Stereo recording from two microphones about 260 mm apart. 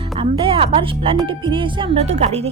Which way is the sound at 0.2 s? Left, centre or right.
Centre.